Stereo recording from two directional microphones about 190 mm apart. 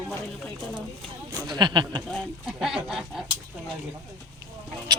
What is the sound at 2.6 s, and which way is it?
Speech, centre (ahead or behind).